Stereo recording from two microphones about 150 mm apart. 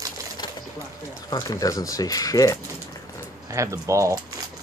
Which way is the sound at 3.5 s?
20° right (ahead or behind).